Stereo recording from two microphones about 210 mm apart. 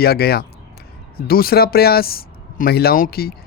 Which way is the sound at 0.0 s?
50° left (ahead or behind).